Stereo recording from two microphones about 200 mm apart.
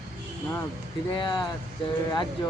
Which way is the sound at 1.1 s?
20° left (ahead or behind).